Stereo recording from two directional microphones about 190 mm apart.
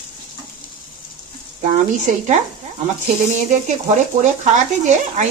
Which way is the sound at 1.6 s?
40° right (ahead or behind).